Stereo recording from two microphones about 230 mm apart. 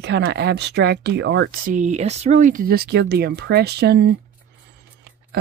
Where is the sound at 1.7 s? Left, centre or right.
Right.